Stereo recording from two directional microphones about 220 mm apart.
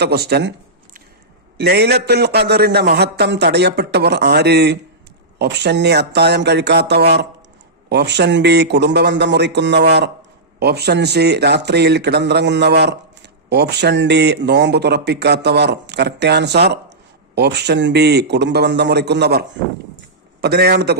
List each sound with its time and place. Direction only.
0.0 s speech: 45° right (ahead or behind)
1.5 s speech: 50° right (ahead or behind)